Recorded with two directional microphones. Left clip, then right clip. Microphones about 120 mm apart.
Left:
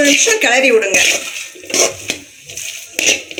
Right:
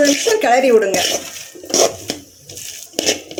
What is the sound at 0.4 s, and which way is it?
Speech, 75° right (ahead or behind).